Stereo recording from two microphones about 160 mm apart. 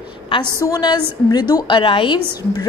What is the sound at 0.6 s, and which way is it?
A woman's voice, 25° left (ahead or behind).